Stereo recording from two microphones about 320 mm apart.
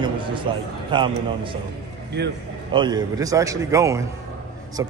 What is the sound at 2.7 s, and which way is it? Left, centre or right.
A man's voice, centre.